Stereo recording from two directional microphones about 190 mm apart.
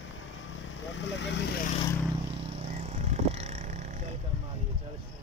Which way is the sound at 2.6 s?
35° right (ahead or behind).